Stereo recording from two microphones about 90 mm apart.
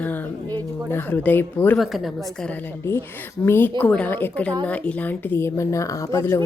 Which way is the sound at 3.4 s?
25° left (ahead or behind).